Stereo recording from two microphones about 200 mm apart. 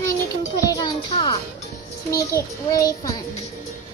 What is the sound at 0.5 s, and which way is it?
Speech, 20° left (ahead or behind).